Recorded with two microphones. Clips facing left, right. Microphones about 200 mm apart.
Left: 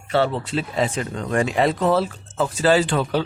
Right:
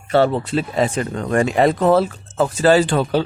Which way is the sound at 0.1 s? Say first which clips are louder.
Right 5 dB; 45° right (ahead or behind).